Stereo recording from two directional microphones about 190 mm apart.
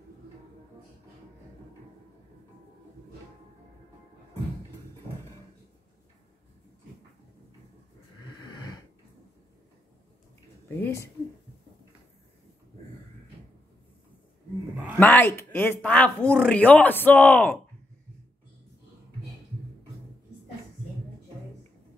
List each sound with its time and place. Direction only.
8.4 s wheeze: 20° left (ahead or behind)
10.7 s speech: 15° left (ahead or behind)
15.0 s speech: 10° left (ahead or behind)